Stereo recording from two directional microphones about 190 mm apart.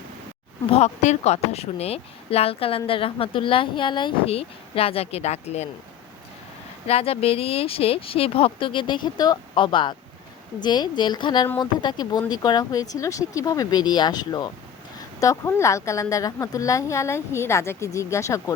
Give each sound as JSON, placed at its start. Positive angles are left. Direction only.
{"t": 0.8, "sound": "a woman's voice", "side_deg": 35}
{"t": 6.8, "sound": "a woman's voice", "side_deg": 30}